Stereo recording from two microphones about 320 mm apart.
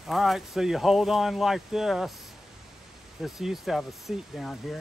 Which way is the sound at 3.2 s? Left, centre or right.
Centre.